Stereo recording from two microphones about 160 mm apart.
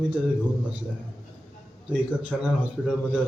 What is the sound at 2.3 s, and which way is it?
Speech, 5° left (ahead or behind).